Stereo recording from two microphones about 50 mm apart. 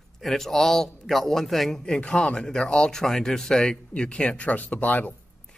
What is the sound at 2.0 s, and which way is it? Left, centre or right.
Speech, left.